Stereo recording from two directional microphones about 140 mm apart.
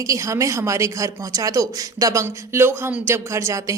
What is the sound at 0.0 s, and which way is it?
A woman's voice, 25° right (ahead or behind).